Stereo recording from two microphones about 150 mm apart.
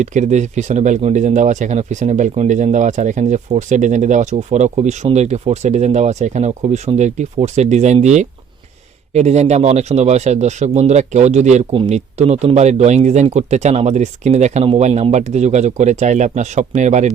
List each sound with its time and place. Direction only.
0.0 s speech: 50° right (ahead or behind)
11.7 s speech: 35° right (ahead or behind)
11.9 s speech: 50° right (ahead or behind)